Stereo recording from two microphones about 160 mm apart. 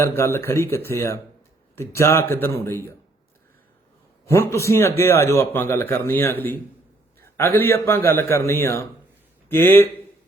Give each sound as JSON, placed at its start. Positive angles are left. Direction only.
{"t": 0.2, "sound": "a man's voice", "side_deg": 15}
{"t": 4.3, "sound": "a man's voice", "side_deg": 15}